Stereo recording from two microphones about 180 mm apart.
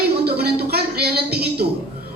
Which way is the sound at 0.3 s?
60° right (ahead or behind).